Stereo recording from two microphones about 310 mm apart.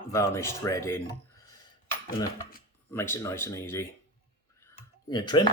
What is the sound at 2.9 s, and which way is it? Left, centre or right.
Speech, centre.